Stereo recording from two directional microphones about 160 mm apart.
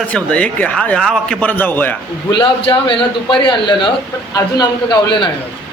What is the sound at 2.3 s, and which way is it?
A man's voice, 30° left (ahead or behind).